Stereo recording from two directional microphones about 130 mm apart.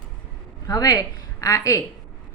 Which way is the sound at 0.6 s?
30° left (ahead or behind).